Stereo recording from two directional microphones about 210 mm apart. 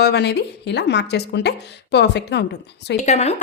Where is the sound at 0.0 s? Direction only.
50° left (ahead or behind).